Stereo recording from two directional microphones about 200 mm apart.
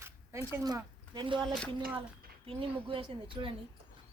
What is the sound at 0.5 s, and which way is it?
Speech, 15° right (ahead or behind).